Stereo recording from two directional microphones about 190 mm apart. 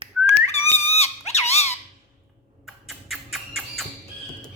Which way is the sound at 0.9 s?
35° left (ahead or behind).